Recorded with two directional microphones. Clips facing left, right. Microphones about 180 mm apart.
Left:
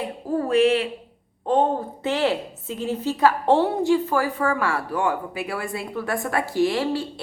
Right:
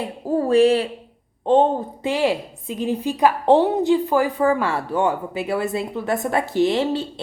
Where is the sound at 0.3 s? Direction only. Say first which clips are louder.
Right 3 dB; 30° right (ahead or behind).